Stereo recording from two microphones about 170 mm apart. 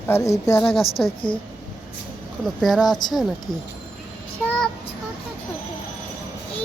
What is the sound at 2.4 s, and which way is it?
Speech, centre (ahead or behind).